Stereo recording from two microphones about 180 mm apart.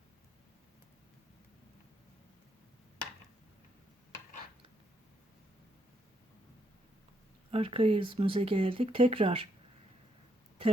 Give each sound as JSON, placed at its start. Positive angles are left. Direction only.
{"t": 7.5, "sound": "speech", "side_deg": -30}